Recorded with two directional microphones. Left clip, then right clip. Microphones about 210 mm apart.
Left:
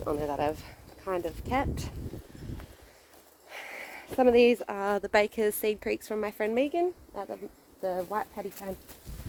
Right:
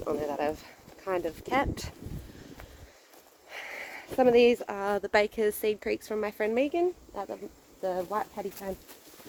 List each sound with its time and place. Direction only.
0.0 s speech: 25° left (ahead or behind)
1.2 s speech: centre (ahead or behind)
3.5 s speech: 20° left (ahead or behind)